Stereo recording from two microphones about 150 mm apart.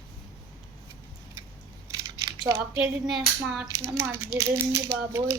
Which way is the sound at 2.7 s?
5° right (ahead or behind).